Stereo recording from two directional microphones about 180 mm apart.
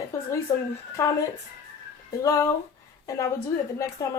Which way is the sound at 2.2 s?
15° left (ahead or behind).